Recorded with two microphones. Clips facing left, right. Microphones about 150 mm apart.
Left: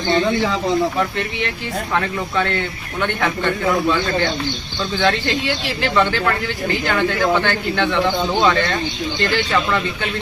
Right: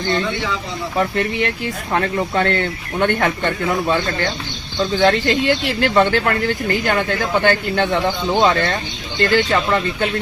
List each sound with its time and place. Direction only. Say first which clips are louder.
0.3 s speech: left 6 dB; 40° left (ahead or behind)
0.9 s speech: right 3 dB; 45° right (ahead or behind)
4.9 s speech: right 3 dB; 40° right (ahead or behind)